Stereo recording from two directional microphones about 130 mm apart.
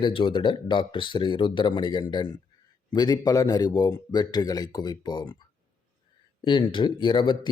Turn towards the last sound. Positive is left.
turn(degrees=40)  # may be behind; listen again after turning